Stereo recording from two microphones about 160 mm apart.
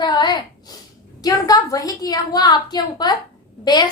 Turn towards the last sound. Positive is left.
turn(degrees=25)  # may be behind; listen again after turning